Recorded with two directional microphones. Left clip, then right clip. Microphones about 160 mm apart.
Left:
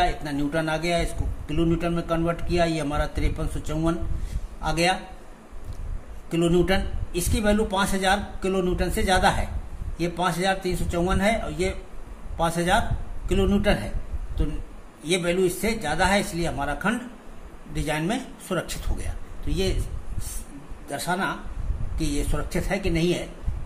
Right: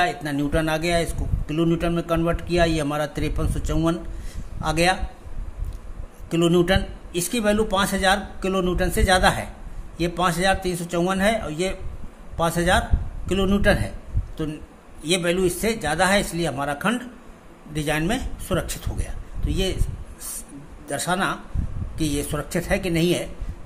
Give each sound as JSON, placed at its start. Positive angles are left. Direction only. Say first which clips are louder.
{"t": 0.0, "sound": "a man's voice", "louder": "right 2 dB", "side_deg": -30}
{"t": 6.3, "sound": "a man's voice", "louder": "right 3 dB", "side_deg": -25}
{"t": 20.9, "sound": "a man's voice", "louder": "right 3 dB", "side_deg": -35}